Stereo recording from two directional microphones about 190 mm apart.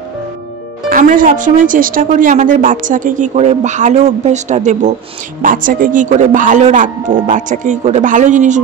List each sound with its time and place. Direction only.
0.8 s speech: 45° right (ahead or behind)